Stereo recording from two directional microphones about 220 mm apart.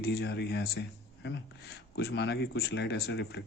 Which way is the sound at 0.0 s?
45° left (ahead or behind).